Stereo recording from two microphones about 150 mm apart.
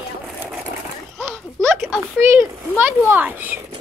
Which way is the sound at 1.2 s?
15° right (ahead or behind).